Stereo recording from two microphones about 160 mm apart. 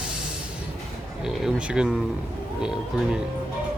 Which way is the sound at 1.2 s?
5° right (ahead or behind).